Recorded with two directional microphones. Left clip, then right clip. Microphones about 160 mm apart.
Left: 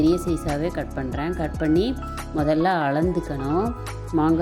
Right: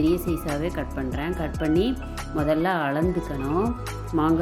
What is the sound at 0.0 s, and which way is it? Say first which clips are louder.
Speech: left 3 dB; 25° left (ahead or behind).